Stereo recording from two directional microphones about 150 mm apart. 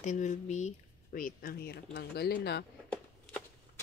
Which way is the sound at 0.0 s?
55° left (ahead or behind).